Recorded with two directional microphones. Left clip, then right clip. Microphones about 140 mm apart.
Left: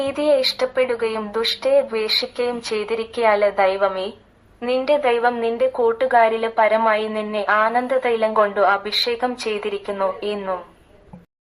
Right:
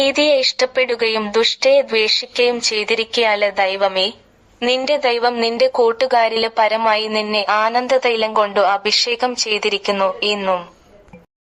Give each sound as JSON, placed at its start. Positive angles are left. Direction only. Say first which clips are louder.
{"t": 0.2, "sound": "a woman's voice", "louder": "right 3 dB", "side_deg": -40}